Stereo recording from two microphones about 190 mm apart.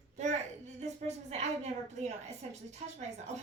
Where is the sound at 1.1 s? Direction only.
35° right (ahead or behind).